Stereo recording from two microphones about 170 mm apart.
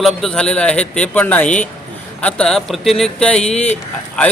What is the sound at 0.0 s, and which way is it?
A man's voice, centre (ahead or behind).